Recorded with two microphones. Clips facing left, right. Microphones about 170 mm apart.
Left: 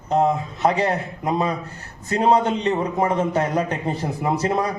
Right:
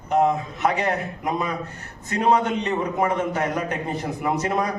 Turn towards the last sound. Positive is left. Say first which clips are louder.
# left 2 dB
turn(degrees=30)  # may be behind; listen again after turning